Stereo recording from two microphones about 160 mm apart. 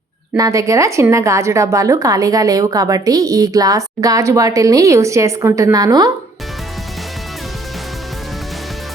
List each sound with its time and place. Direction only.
0.3 s a woman's voice: 20° right (ahead or behind)